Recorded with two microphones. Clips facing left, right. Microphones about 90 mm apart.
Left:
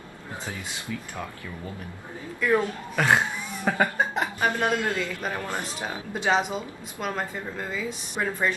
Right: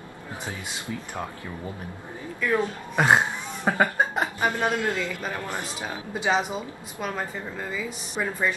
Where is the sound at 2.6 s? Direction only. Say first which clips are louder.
Right 2 dB; 20° right (ahead or behind).